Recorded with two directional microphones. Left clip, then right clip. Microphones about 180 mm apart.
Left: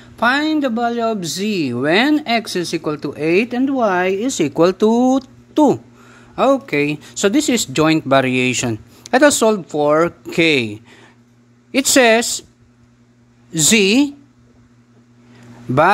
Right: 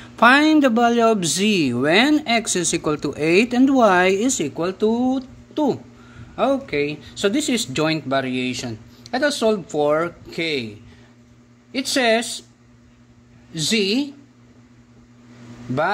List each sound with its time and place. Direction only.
0.0 s speech: centre (ahead or behind)
4.3 s speech: 25° left (ahead or behind)
13.5 s speech: 40° left (ahead or behind)